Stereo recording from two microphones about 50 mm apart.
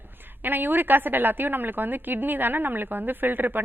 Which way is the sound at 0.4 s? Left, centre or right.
Right.